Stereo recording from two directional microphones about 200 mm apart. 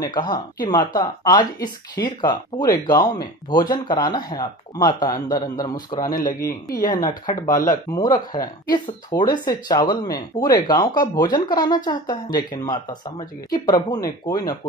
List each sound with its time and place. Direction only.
0.0 s speech: 20° left (ahead or behind)
6.1 s speech: 45° left (ahead or behind)
6.7 s speech: 20° left (ahead or behind)
7.4 s speech: 40° left (ahead or behind)
7.7 s speech: 20° left (ahead or behind)